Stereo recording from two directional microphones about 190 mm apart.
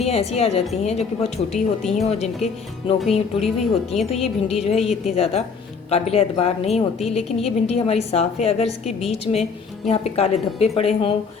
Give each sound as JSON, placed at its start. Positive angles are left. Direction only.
{"t": 0.0, "sound": "a woman's voice", "side_deg": 35}
{"t": 1.5, "sound": "speech", "side_deg": 0}
{"t": 2.0, "sound": "a woman's voice", "side_deg": 35}
{"t": 3.4, "sound": "speech", "side_deg": 0}
{"t": 4.1, "sound": "a woman's voice", "side_deg": 35}
{"t": 4.8, "sound": "speech", "side_deg": 0}
{"t": 5.1, "sound": "a woman's voice", "side_deg": 30}